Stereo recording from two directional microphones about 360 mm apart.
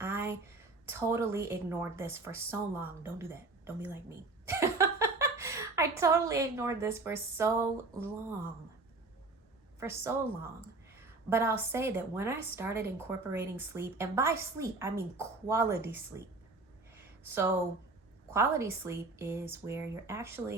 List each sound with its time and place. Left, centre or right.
0.0 s a sound: centre
2.5 s a woman's voice: centre
9.8 s speech: centre
10.9 s a sound: centre
11.7 s speech: centre
17.2 s speech: centre